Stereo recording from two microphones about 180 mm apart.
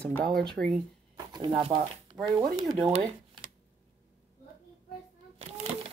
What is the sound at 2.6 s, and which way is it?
Speech, 20° right (ahead or behind).